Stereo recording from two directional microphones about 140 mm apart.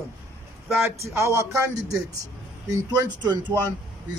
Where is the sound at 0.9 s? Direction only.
20° right (ahead or behind).